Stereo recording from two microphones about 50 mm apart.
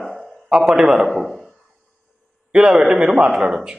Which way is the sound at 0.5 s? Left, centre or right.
Centre.